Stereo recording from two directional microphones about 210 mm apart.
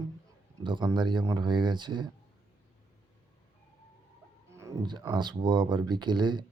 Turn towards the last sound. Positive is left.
turn(degrees=-20)  # may be behind; listen again after turning